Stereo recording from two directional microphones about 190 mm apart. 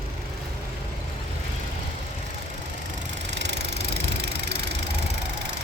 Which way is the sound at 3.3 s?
65° right (ahead or behind).